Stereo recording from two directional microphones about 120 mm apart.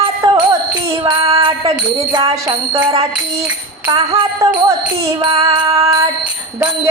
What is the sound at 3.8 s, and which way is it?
Music, 30° right (ahead or behind).